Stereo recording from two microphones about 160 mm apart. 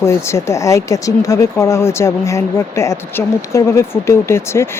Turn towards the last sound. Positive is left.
turn(degrees=15)  # may be behind; listen again after turning